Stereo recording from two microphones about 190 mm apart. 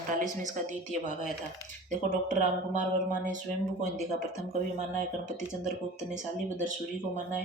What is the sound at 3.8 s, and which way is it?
Speech, 40° right (ahead or behind).